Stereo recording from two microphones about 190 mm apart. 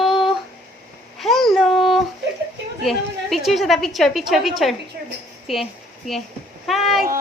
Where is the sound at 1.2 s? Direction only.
Centre (ahead or behind).